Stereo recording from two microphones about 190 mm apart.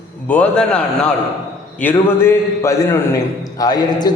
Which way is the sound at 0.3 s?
5° left (ahead or behind).